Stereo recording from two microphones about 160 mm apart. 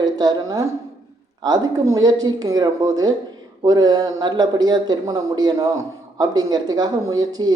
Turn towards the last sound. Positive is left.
turn(degrees=-25)  # may be behind; listen again after turning